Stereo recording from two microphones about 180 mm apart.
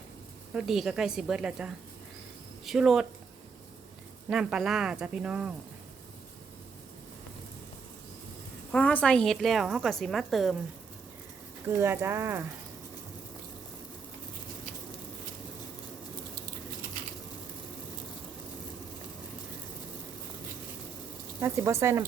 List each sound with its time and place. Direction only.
0.5 s a woman's voice: centre (ahead or behind)
4.3 s a woman's voice: 5° right (ahead or behind)
8.7 s a woman's voice: 5° left (ahead or behind)
11.8 s speech: 15° right (ahead or behind)
21.4 s speech: 15° right (ahead or behind)